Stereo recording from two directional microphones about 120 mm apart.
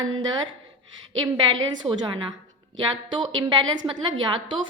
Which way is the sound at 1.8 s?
40° right (ahead or behind).